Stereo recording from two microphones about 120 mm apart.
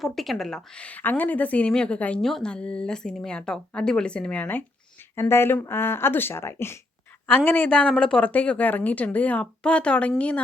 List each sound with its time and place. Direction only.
0.0 s a woman's voice: centre (ahead or behind)